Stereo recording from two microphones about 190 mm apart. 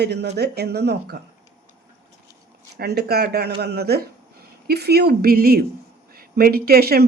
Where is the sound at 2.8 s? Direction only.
55° right (ahead or behind).